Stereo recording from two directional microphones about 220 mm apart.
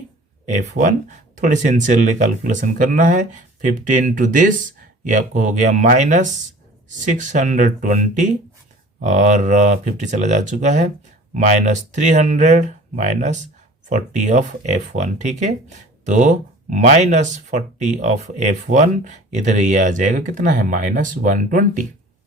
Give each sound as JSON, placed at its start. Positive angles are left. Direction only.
{"t": 0.4, "sound": "speech", "side_deg": -35}